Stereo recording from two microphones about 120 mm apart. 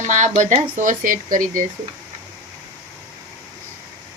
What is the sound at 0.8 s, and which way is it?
Speech, 90° right.